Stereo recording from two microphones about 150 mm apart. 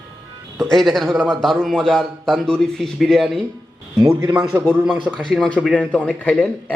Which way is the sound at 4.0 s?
25° right (ahead or behind).